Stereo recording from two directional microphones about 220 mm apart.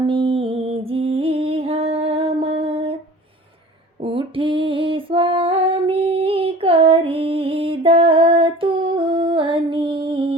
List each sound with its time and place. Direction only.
0.0 s music: 20° right (ahead or behind)
4.0 s music: 25° right (ahead or behind)